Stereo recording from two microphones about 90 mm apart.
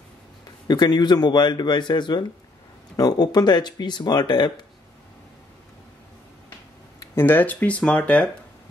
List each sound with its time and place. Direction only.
0.7 s speech: 50° left (ahead or behind)
7.2 s speech: 20° left (ahead or behind)